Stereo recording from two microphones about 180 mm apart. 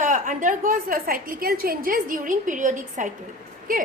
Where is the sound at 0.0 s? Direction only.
45° right (ahead or behind).